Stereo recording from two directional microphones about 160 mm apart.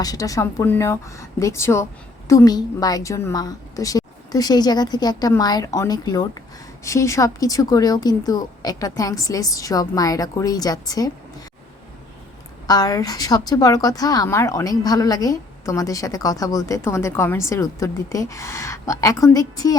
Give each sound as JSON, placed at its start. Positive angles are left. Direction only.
{"t": 0.0, "sound": "a woman's voice", "side_deg": 20}
{"t": 12.6, "sound": "a woman's voice", "side_deg": 25}